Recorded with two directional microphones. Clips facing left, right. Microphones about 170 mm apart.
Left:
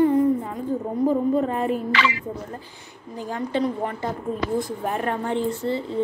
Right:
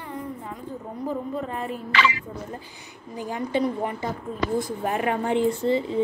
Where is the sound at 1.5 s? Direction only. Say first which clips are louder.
Left 7 dB; 65° left (ahead or behind).